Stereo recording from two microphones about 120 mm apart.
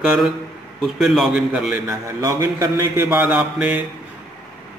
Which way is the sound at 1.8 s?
25° right (ahead or behind).